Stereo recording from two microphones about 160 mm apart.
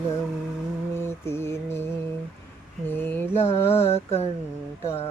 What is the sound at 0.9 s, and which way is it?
Mantra, 15° left (ahead or behind).